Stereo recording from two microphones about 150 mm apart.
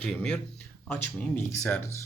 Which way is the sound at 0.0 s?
5° left (ahead or behind).